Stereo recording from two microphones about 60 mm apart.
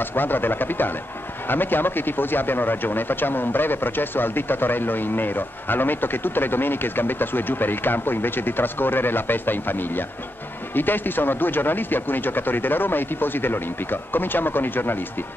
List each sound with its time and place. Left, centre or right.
0.0 s speech: left